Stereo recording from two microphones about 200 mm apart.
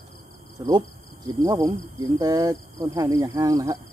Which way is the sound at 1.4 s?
20° right (ahead or behind).